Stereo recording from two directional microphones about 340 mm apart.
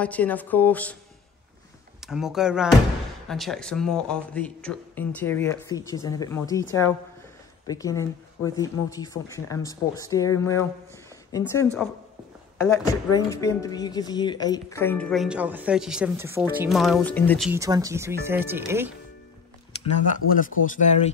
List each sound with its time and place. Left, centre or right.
0.0 s a woman's voice: centre
2.0 s a woman's voice: centre
7.6 s a woman's voice: centre
20.3 s speech: left